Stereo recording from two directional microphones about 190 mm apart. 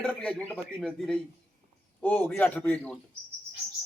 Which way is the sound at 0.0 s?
5° left (ahead or behind).